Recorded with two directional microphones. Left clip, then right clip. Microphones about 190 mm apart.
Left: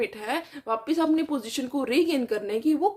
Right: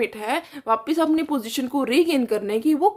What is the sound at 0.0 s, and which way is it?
Speech, 35° right (ahead or behind).